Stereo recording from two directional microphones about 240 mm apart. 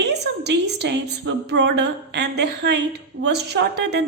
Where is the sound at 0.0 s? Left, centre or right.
Right.